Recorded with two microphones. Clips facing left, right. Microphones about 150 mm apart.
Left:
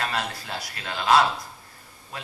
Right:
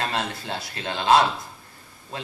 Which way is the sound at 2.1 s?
25° right (ahead or behind).